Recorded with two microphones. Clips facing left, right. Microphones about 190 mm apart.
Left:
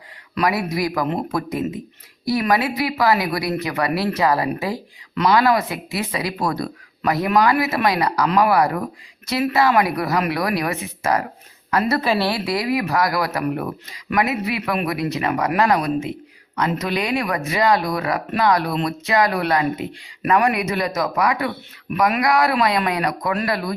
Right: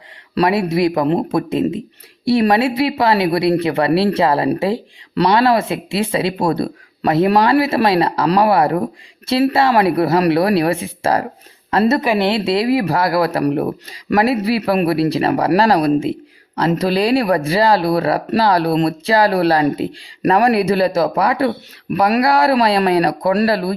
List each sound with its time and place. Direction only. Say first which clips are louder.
0.3 s speech: right 6 dB; 25° right (ahead or behind)